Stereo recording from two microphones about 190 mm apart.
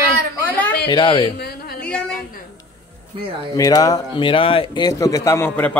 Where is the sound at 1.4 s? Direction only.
55° left (ahead or behind).